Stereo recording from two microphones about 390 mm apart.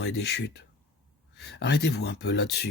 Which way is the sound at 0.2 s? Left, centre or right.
Left.